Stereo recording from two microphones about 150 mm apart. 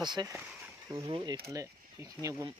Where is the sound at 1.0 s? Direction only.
35° right (ahead or behind).